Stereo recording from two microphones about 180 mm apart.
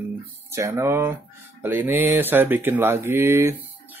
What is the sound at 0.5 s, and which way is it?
Speech, 15° right (ahead or behind).